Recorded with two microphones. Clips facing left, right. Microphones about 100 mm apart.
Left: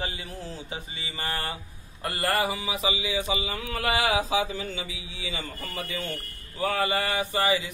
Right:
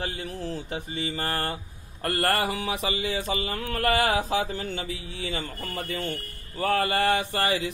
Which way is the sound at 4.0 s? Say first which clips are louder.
Right 1 dB; 55° right (ahead or behind).